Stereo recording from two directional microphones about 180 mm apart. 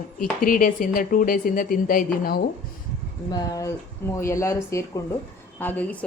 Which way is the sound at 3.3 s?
20° left (ahead or behind).